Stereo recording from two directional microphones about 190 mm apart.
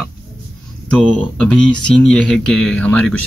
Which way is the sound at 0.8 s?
5° left (ahead or behind).